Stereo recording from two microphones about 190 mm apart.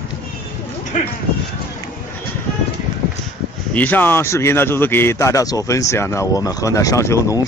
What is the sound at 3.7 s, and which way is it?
Speech, 10° left (ahead or behind).